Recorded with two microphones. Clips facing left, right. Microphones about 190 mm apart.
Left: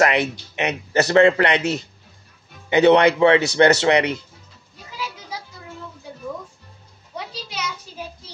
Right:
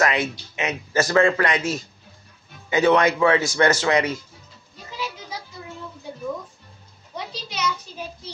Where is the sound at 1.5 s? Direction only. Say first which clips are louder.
Left 3 dB; 65° left (ahead or behind).